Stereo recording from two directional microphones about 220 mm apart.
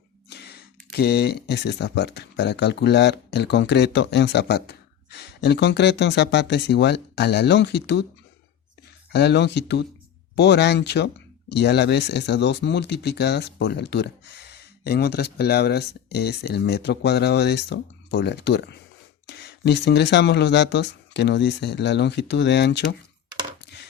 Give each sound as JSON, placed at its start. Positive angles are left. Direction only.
{"t": 0.3, "sound": "speech", "side_deg": 50}
{"t": 9.1, "sound": "speech", "side_deg": 50}